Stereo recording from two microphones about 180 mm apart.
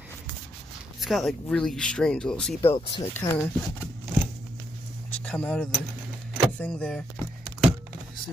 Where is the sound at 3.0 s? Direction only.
15° left (ahead or behind).